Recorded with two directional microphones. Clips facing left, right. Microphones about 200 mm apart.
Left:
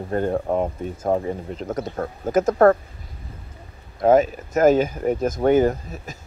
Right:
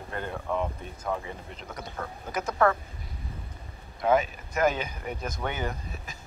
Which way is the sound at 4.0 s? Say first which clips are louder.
Left 8 dB; 45° left (ahead or behind).